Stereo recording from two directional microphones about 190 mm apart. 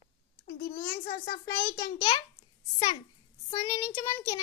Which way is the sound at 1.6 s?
20° left (ahead or behind).